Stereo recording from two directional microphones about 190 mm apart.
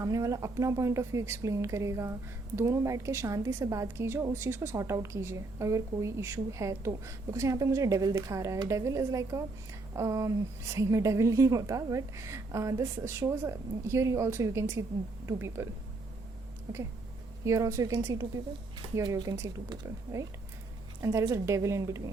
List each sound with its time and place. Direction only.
0.0 s speech: 15° right (ahead or behind)